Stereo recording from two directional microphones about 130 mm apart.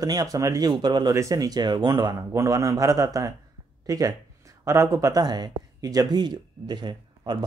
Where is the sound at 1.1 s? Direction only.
25° right (ahead or behind).